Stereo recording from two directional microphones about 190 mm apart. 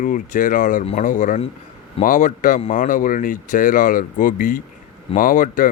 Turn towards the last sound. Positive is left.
turn(degrees=45)  # may be behind; listen again after turning